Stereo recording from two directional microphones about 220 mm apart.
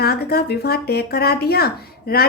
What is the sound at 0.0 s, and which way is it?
A woman's voice, 45° left (ahead or behind).